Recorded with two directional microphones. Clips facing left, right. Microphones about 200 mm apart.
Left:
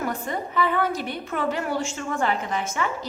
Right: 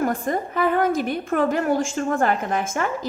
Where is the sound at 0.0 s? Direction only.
45° right (ahead or behind).